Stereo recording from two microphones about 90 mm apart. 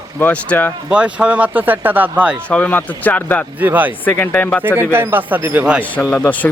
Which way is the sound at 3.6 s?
20° right (ahead or behind).